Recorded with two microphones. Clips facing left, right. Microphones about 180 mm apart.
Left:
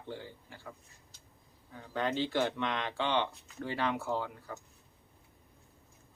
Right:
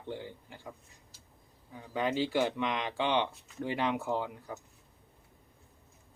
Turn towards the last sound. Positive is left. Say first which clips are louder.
# right 2 dB
turn(degrees=-15)  # may be behind; listen again after turning